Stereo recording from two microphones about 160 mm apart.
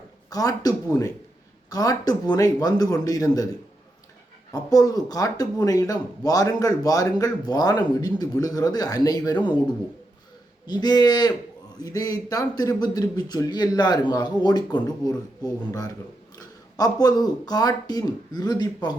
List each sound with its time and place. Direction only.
0.3 s speech: 25° left (ahead or behind)
4.5 s speech: 25° left (ahead or behind)
10.7 s speech: 25° left (ahead or behind)